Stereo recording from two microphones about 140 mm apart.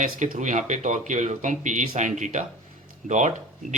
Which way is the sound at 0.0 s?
65° right (ahead or behind).